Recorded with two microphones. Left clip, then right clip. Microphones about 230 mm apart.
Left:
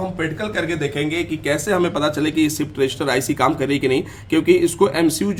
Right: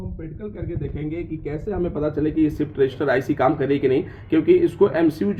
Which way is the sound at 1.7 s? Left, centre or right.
Left.